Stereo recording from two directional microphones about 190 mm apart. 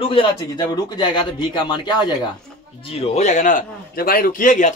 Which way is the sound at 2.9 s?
35° left (ahead or behind).